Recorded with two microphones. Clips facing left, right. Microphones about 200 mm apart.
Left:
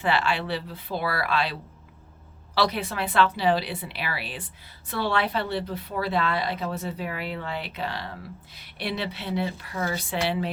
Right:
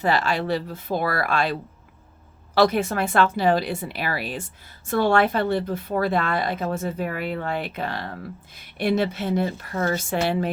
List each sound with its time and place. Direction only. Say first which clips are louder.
0.0 s a woman's voice: right 3 dB; 40° right (ahead or behind)
2.6 s a woman's voice: right 6 dB; 45° right (ahead or behind)